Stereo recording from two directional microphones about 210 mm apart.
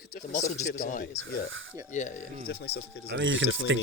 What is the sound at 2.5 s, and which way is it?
Speech, 50° left (ahead or behind).